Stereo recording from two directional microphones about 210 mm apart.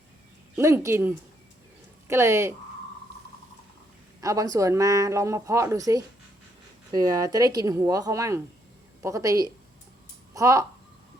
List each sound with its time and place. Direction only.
0.5 s speech: 15° right (ahead or behind)
4.2 s speech: 15° right (ahead or behind)